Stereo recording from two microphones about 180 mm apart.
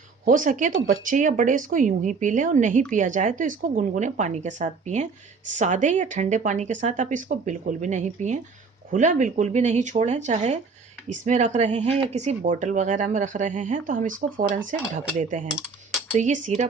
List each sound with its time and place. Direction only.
0.3 s speech: 45° right (ahead or behind)
15.2 s speech: 45° right (ahead or behind)
15.4 s a sound: centre (ahead or behind)
16.1 s speech: 40° right (ahead or behind)